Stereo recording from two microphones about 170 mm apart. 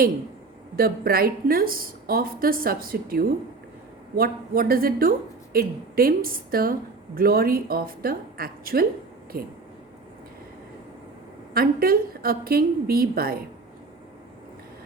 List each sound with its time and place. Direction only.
0.8 s a woman's voice: 60° right (ahead or behind)
11.5 s a woman's voice: 60° right (ahead or behind)